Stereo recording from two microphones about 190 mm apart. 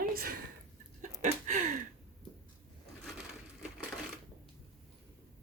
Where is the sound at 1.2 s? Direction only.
40° right (ahead or behind).